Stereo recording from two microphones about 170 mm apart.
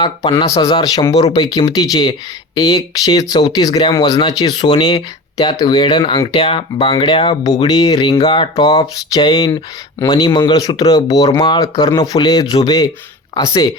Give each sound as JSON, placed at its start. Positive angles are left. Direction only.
{"t": 0.0, "sound": "speech", "side_deg": 25}